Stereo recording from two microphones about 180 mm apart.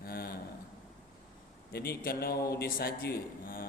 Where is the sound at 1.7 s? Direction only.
60° left (ahead or behind).